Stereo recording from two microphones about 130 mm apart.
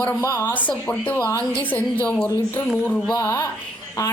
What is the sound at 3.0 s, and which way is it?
A woman's voice, 25° left (ahead or behind).